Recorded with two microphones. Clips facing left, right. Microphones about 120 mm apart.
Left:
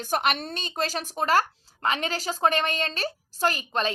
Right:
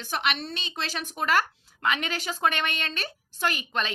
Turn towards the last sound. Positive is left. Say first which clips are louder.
# left 3 dB
turn(degrees=35)  # may be behind; listen again after turning